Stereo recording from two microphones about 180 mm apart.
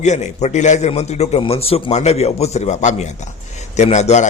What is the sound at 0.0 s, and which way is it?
A man's voice, 40° left (ahead or behind).